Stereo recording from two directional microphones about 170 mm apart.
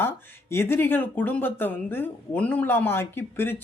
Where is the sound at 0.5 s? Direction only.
15° left (ahead or behind).